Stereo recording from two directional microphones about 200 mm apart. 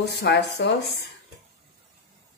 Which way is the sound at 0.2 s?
55° left (ahead or behind).